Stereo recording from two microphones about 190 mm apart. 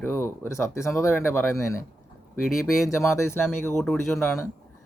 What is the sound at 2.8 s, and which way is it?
Speech, 15° left (ahead or behind).